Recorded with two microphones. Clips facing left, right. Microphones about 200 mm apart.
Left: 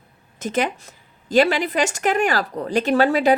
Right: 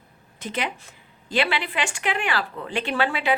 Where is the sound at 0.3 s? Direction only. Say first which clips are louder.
Left 7 dB; 45° left (ahead or behind).